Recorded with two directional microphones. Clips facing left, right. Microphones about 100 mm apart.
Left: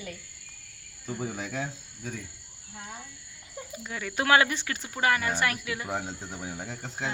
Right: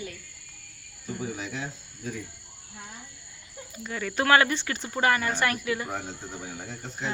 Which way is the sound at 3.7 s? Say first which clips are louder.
Right 4 dB; 5° left (ahead or behind).